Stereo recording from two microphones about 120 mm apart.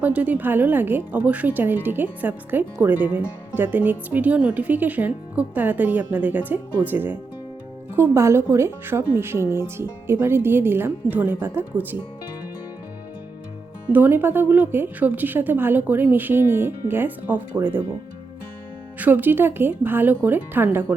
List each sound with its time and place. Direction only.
0.0 s a woman's voice: 10° right (ahead or behind)
13.9 s a woman's voice: 15° right (ahead or behind)
18.9 s a woman's voice: 15° right (ahead or behind)